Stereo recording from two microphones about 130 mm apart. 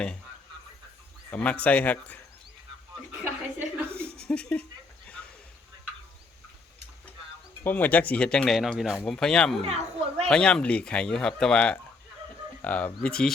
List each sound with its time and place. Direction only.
1.3 s speech: 10° left (ahead or behind)
4.2 s speech: 10° left (ahead or behind)
7.6 s speech: 15° left (ahead or behind)
9.6 s speech: 55° right (ahead or behind)
10.2 s speech: 5° left (ahead or behind)